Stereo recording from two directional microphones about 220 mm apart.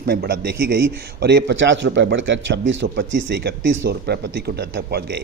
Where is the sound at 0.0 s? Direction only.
45° right (ahead or behind).